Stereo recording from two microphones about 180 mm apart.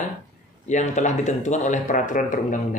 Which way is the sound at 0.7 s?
40° left (ahead or behind).